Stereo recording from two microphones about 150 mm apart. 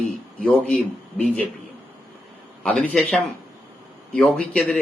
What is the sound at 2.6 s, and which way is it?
Speech, 10° left (ahead or behind).